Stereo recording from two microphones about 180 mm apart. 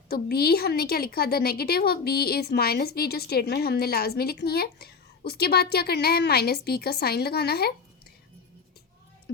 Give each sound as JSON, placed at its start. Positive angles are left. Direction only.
{"t": 0.1, "sound": "a woman's voice", "side_deg": 60}